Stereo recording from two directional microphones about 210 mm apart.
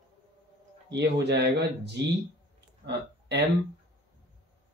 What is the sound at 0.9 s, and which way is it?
Speech, 55° right (ahead or behind).